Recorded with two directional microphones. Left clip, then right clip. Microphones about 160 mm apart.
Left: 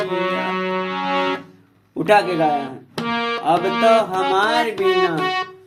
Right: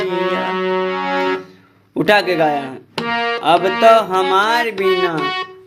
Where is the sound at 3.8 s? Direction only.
55° right (ahead or behind).